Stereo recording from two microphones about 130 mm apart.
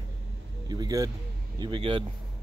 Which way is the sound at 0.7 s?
30° right (ahead or behind).